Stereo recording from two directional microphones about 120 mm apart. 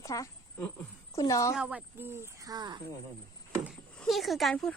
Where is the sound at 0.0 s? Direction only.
30° left (ahead or behind).